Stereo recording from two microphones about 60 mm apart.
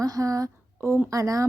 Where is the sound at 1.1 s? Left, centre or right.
Right.